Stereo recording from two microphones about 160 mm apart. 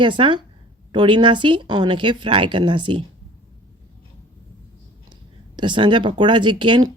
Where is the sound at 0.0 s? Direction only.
30° right (ahead or behind).